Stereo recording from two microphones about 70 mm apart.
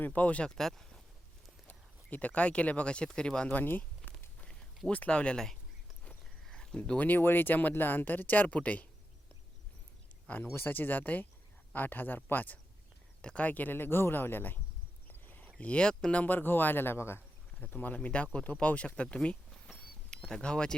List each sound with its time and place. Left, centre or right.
0.0 s speech: left
0.5 s speech: centre
1.6 s speech: left
3.6 s speech: left
10.5 s speech: left
15.0 s a sound: left
15.5 s speech: centre
16.2 s speech: left
17.6 s speech: left